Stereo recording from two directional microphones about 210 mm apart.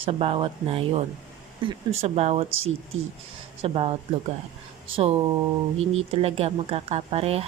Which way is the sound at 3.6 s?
25° right (ahead or behind).